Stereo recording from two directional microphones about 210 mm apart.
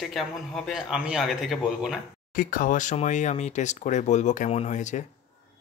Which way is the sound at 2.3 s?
40° left (ahead or behind).